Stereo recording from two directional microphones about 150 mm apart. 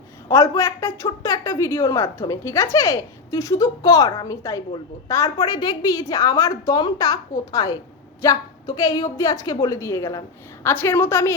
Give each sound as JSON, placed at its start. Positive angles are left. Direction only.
{"t": 0.3, "sound": "a woman's voice", "side_deg": 20}